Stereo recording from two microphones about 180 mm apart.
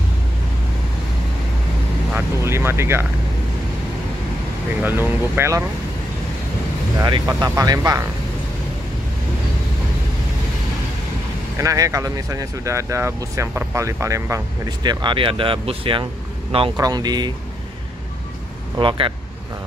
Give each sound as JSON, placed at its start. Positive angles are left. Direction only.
{"t": 2.1, "sound": "speech", "side_deg": -15}
{"t": 4.8, "sound": "speech", "side_deg": -10}
{"t": 7.0, "sound": "speech", "side_deg": -20}
{"t": 11.5, "sound": "speech", "side_deg": -20}
{"t": 18.8, "sound": "speech", "side_deg": -30}